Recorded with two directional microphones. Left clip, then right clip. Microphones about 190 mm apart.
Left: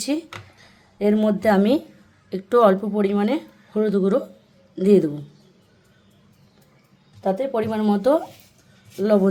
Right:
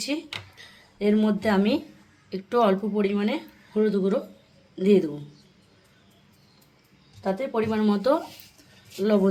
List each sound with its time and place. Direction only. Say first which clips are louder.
0.0 s speech: left 4 dB; 45° left (ahead or behind)
7.2 s speech: left 4 dB; 50° left (ahead or behind)